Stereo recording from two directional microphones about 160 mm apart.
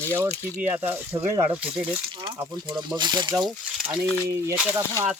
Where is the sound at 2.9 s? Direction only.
30° right (ahead or behind).